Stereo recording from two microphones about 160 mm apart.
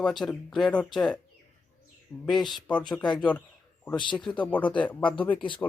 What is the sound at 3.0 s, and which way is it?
Speech, 25° left (ahead or behind).